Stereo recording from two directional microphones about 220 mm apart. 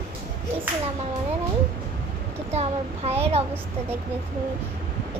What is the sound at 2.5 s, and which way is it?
Child singing, 30° right (ahead or behind).